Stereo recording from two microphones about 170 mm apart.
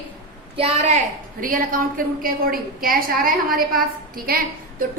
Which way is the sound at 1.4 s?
55° right (ahead or behind).